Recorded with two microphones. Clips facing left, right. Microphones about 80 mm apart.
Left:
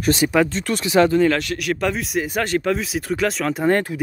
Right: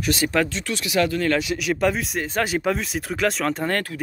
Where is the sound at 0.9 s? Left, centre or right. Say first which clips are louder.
Left 7 dB; left.